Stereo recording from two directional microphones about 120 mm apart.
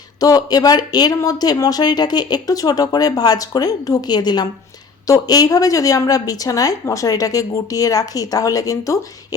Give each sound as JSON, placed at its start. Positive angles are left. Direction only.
{"t": 0.2, "sound": "a woman's voice", "side_deg": 30}